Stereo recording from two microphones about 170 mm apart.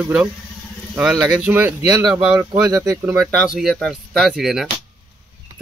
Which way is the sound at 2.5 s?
20° right (ahead or behind).